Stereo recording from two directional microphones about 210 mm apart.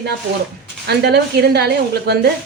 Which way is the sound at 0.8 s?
50° right (ahead or behind).